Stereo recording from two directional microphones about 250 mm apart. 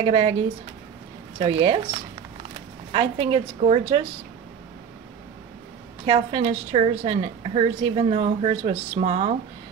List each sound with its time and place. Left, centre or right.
0.0 s a woman's voice: right
1.4 s a woman's voice: right
6.0 s a woman's voice: right